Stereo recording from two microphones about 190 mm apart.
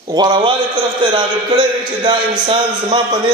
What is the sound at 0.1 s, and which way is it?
A man's voice, 25° right (ahead or behind).